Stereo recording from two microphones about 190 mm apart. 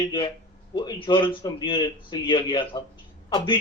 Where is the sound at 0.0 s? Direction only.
25° left (ahead or behind).